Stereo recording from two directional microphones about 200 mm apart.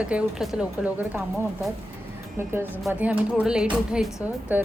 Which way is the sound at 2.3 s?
10° right (ahead or behind).